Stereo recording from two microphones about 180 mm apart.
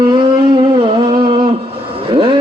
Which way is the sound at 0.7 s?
25° right (ahead or behind).